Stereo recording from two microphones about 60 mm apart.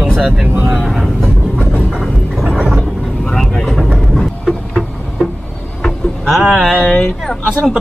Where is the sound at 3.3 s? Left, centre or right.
Centre.